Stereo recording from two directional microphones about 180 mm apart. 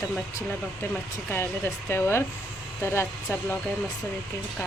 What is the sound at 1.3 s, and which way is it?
A woman's voice, 15° left (ahead or behind).